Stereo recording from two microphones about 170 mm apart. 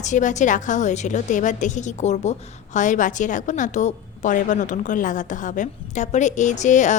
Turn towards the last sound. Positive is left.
turn(degrees=45)  # may be behind; listen again after turning